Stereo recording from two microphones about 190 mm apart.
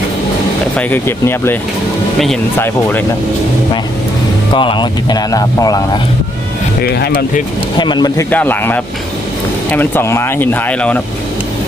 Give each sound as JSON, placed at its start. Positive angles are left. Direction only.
{"t": 0.8, "sound": "speech", "side_deg": 10}
{"t": 4.5, "sound": "speech", "side_deg": 25}
{"t": 6.8, "sound": "speech", "side_deg": 55}
{"t": 7.8, "sound": "speech", "side_deg": 25}